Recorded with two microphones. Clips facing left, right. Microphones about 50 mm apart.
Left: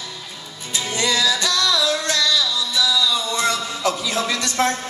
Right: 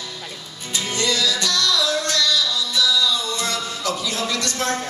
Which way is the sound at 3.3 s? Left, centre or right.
Left.